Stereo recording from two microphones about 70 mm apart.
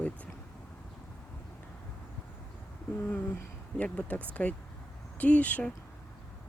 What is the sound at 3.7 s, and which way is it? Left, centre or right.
Speech, centre.